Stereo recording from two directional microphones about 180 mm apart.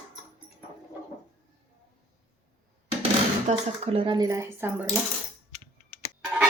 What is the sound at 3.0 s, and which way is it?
Speech, 35° right (ahead or behind).